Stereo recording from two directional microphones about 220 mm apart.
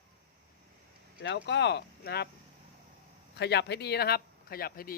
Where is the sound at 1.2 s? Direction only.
55° left (ahead or behind).